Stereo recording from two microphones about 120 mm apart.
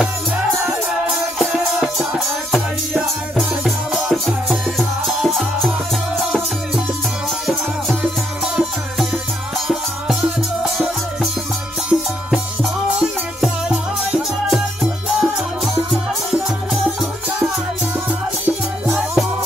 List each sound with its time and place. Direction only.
1.4 s music: centre (ahead or behind)
9.7 s music: 5° right (ahead or behind)
11.9 s music: 5° left (ahead or behind)
13.4 s music: 5° right (ahead or behind)